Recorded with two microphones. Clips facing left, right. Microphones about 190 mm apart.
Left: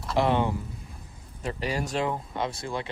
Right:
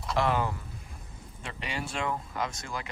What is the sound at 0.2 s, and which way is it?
Speech, 30° left (ahead or behind).